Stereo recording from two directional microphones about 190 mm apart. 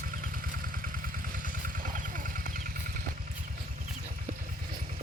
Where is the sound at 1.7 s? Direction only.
45° right (ahead or behind).